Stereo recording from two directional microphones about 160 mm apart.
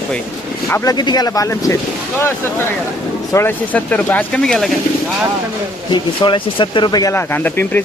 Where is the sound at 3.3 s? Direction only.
10° left (ahead or behind).